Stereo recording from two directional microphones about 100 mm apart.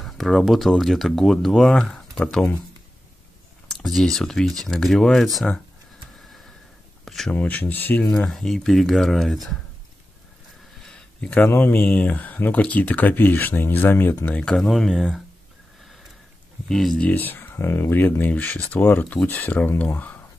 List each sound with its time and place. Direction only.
0.0 s speech: centre (ahead or behind)
3.6 s speech: centre (ahead or behind)
7.1 s speech: 5° left (ahead or behind)
7.3 s speech: 15° left (ahead or behind)
8.3 s speech: 5° left (ahead or behind)
10.8 s a sound: 5° left (ahead or behind)
11.2 s speech: 20° left (ahead or behind); by 15.2 s 5° left (ahead or behind)
16.6 s speech: 5° left (ahead or behind)
17.1 s speech: 20° left (ahead or behind)